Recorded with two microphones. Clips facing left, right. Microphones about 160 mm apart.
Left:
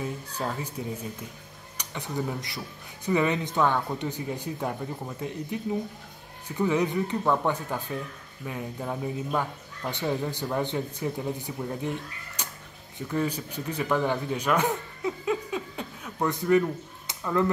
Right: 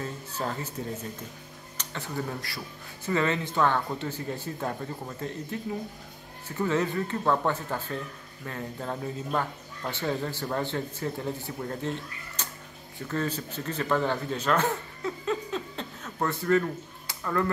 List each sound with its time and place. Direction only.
0.0 s speech: 10° left (ahead or behind)